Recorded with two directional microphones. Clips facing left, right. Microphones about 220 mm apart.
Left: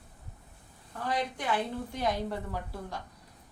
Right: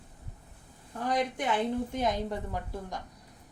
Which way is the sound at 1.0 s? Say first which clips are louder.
Right 3 dB; 20° right (ahead or behind).